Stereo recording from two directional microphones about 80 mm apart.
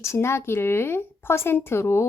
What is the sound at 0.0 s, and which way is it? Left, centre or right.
Speech, left.